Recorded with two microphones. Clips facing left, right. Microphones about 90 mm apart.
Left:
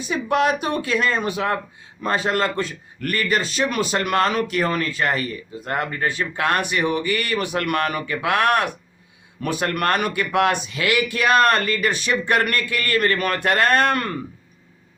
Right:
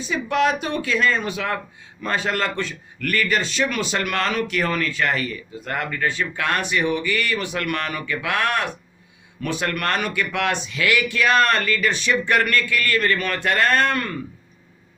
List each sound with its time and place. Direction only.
0.1 s a man's voice: 45° left (ahead or behind)